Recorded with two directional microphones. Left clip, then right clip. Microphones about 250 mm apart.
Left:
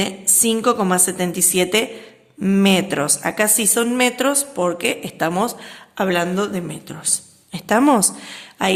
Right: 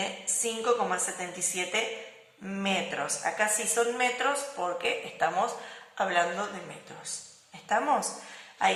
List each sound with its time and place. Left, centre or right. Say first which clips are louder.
0.0 s a woman's voice: left 11 dB; left
7.5 s a woman's voice: left 11 dB; left